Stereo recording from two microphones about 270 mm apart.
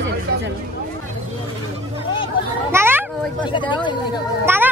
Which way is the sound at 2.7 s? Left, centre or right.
Centre.